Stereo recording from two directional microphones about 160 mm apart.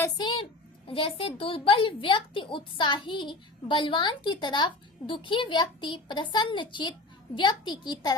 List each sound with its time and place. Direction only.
0.0 s a woman's voice: 30° left (ahead or behind)